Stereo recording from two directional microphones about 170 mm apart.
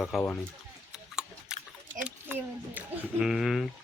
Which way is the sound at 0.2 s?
10° left (ahead or behind).